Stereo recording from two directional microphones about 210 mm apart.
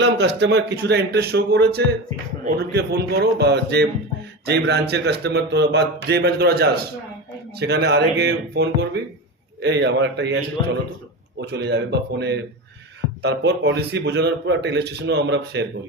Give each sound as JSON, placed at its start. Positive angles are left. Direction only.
{"t": 0.0, "sound": "a man's voice", "side_deg": -55}